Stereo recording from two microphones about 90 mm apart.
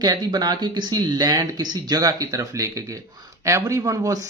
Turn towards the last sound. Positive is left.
turn(degrees=-40)  # may be behind; listen again after turning